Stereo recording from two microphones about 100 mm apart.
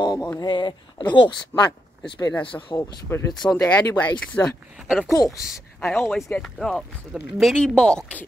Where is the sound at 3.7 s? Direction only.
15° left (ahead or behind).